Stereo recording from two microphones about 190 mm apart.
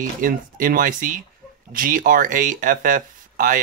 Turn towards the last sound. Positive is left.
turn(degrees=-45)  # may be behind; listen again after turning